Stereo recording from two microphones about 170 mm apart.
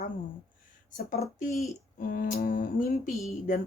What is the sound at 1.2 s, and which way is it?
Speech, 50° left (ahead or behind).